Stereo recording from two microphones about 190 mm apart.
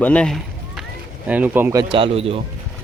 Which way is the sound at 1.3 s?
10° right (ahead or behind).